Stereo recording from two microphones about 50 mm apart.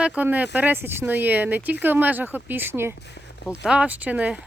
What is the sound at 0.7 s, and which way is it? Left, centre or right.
Speech, right.